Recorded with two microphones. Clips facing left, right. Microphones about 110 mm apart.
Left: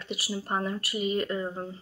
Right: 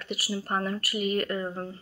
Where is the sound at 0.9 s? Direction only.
60° right (ahead or behind).